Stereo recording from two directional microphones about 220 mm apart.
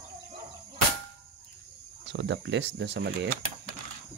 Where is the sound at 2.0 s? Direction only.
55° right (ahead or behind).